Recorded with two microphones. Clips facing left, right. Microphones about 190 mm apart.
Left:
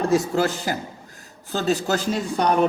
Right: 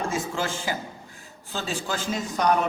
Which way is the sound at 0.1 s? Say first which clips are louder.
Left 8 dB; 40° left (ahead or behind).